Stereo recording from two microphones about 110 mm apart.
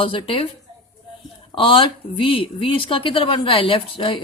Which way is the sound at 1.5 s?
50° left (ahead or behind).